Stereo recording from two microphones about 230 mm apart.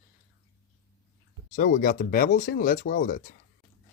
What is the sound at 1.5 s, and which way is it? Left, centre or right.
Speech, left.